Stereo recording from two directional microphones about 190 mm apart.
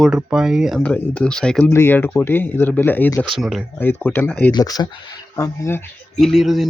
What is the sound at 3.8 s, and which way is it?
Speech, 10° left (ahead or behind).